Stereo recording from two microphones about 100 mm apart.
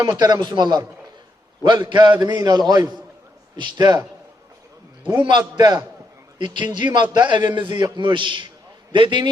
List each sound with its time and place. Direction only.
0.0 s a man's voice: 40° right (ahead or behind)
5.4 s a man's voice: 40° right (ahead or behind)
6.4 s a man's voice: 50° right (ahead or behind)